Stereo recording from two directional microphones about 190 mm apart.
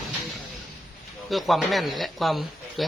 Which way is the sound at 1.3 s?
Centre (ahead or behind).